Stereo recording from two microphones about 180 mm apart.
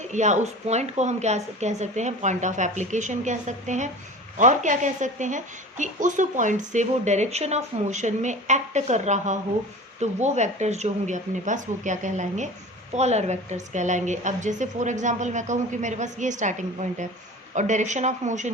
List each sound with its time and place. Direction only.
0.1 s a woman's voice: 40° right (ahead or behind)